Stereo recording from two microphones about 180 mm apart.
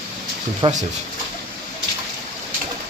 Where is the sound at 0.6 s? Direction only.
25° right (ahead or behind).